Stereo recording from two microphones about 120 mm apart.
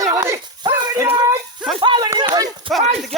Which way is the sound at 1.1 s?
35° right (ahead or behind).